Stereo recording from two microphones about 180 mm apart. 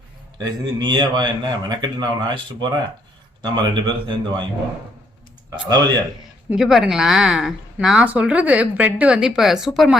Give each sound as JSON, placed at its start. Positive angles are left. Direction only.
{"t": 0.3, "sound": "a man's voice", "side_deg": -25}
{"t": 5.5, "sound": "a man's voice", "side_deg": -20}
{"t": 6.5, "sound": "a woman's voice", "side_deg": -5}